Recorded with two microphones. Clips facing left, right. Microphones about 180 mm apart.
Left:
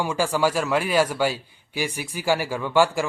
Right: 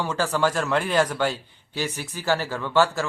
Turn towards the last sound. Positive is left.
turn(degrees=10)  # may be behind; listen again after turning